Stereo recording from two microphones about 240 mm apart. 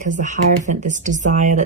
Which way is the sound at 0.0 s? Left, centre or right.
Right.